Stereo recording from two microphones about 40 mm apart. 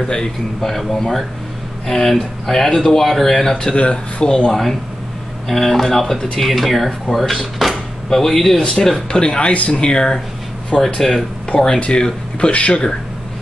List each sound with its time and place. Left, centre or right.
0.0 s speech: left
0.6 s speech: centre
3.7 s speech: left
4.5 s speech: centre
7.5 s a sound: centre
8.1 s speech: centre
9.1 s speech: left
11.0 s speech: centre
11.8 s speech: left